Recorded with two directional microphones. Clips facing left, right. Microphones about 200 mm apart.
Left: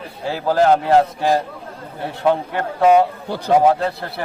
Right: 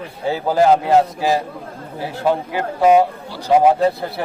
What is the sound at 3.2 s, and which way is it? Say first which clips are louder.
Speech: left 5 dB; 55° left (ahead or behind).